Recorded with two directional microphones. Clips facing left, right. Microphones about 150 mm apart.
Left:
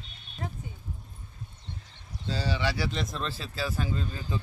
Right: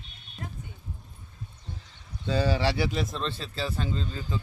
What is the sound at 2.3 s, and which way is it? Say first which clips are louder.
Speech: right 6 dB; 55° right (ahead or behind).